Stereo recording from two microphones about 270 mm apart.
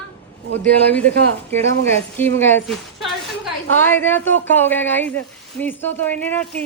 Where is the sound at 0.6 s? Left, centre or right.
Centre.